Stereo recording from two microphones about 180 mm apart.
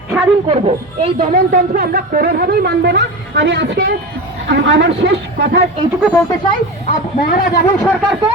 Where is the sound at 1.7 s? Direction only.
55° right (ahead or behind); by 4.9 s 80° right.